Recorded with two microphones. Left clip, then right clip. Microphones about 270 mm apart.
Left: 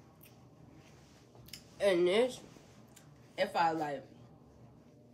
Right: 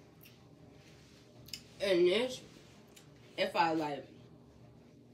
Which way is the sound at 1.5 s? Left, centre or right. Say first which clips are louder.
Left 2 dB; centre.